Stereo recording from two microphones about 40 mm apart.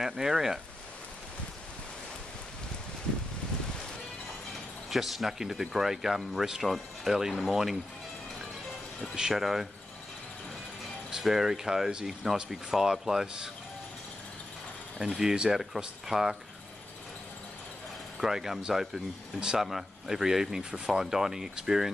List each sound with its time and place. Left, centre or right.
0.0 s speech: centre
4.9 s speech: centre
9.3 s speech: centre
11.1 s speech: centre
15.0 s speech: centre
18.2 s speech: centre
20.7 s speech: right